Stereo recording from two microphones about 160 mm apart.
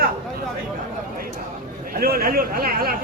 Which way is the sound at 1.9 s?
70° right (ahead or behind).